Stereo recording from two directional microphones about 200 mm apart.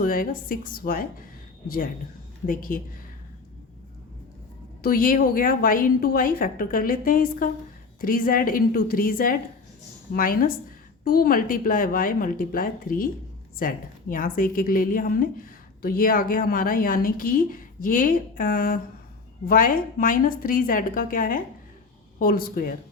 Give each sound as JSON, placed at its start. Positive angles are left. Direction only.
{"t": 0.0, "sound": "a woman's voice", "side_deg": 45}
{"t": 4.8, "sound": "a woman's voice", "side_deg": 45}